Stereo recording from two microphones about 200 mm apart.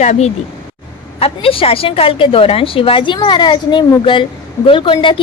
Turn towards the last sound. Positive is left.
turn(degrees=25)  # may be behind; listen again after turning